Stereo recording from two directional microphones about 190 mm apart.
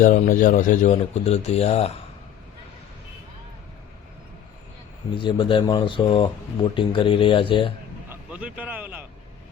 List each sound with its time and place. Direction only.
0.0 s speech: 45° left (ahead or behind)
5.1 s speech: 25° left (ahead or behind)
8.1 s vehicle: 5° right (ahead or behind)